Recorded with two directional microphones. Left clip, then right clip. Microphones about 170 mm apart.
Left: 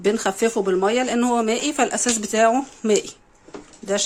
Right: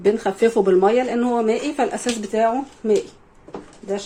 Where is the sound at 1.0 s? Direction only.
25° left (ahead or behind).